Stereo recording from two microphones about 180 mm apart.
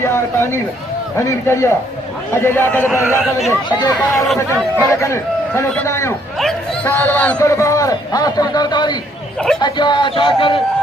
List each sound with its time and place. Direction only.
0.0 s a man's voice: 15° left (ahead or behind)
6.4 s a sound: 10° left (ahead or behind)
7.3 s a man's voice: 15° left (ahead or behind)